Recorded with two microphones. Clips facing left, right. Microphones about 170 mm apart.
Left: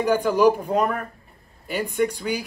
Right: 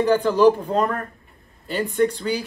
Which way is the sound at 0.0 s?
15° left (ahead or behind).